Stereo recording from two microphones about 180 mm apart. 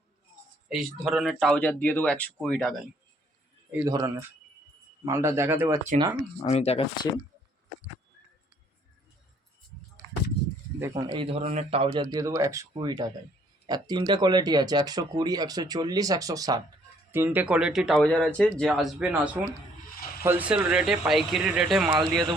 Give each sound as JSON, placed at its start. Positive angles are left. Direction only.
{"t": 0.7, "sound": "speech", "side_deg": 0}
{"t": 3.8, "sound": "speech", "side_deg": -20}
{"t": 6.3, "sound": "speech", "side_deg": 35}
{"t": 10.8, "sound": "speech", "side_deg": -20}
{"t": 12.1, "sound": "speech", "side_deg": -15}